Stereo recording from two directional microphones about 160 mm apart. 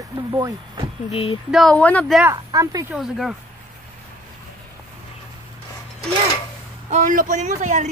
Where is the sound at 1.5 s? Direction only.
5° left (ahead or behind).